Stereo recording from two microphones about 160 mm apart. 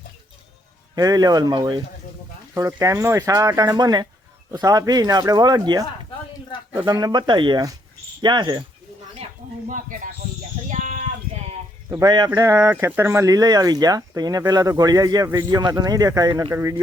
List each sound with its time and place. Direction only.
0.9 s speech: 25° right (ahead or behind)
6.8 s speech: 25° right (ahead or behind)
9.6 s speech: 55° right (ahead or behind)
10.7 s a sound: 50° right (ahead or behind)
11.9 s speech: 20° right (ahead or behind)